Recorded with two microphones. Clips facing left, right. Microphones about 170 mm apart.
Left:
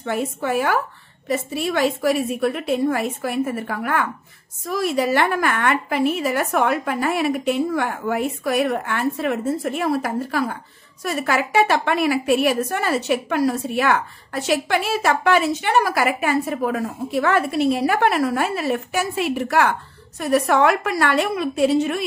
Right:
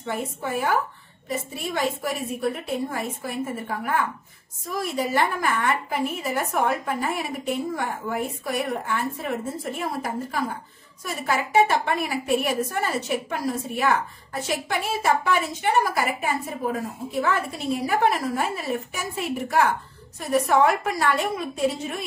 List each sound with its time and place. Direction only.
0.0 s a woman's voice: 80° left